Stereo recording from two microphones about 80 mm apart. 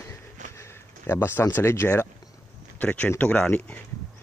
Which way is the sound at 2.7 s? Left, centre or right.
Centre.